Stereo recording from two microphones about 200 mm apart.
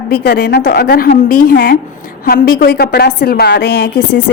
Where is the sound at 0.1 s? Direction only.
55° left (ahead or behind).